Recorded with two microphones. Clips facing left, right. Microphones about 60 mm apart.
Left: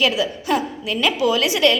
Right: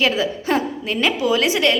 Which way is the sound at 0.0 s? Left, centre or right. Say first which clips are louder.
Right 1 dB; right.